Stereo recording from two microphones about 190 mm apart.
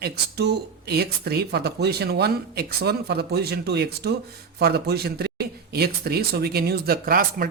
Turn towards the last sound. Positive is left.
turn(degrees=-50)  # may be behind; listen again after turning